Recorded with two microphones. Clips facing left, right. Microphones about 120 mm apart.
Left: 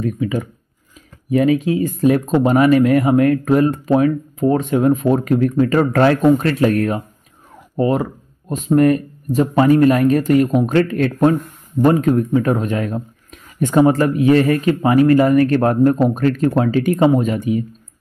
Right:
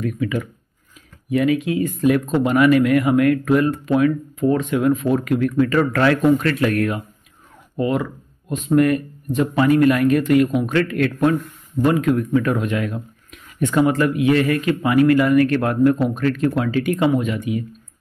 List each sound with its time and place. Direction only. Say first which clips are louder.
0.0 s speech: left 2 dB; 30° left (ahead or behind)